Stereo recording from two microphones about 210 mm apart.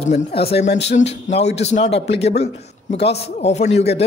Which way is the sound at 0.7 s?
30° left (ahead or behind).